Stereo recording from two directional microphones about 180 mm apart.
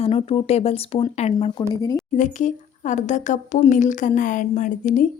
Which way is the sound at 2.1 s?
45° left (ahead or behind).